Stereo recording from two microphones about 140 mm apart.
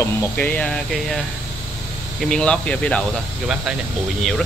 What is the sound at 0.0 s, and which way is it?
Speech, 15° left (ahead or behind).